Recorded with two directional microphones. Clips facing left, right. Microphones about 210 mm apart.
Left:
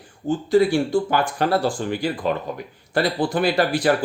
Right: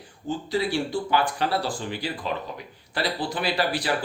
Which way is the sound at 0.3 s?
50° left (ahead or behind).